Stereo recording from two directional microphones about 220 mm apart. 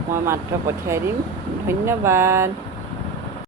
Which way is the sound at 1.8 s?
10° right (ahead or behind).